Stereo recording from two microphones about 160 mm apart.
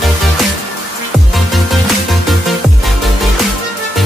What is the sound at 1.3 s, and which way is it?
Music, centre (ahead or behind).